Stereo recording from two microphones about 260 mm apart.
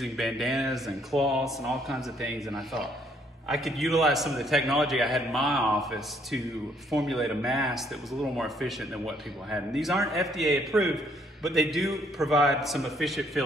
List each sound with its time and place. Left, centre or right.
0.0 s speech: centre